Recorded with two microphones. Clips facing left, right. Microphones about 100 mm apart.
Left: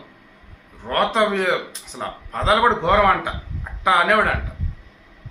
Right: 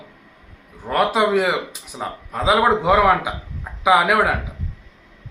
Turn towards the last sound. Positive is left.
turn(degrees=-10)  # may be behind; listen again after turning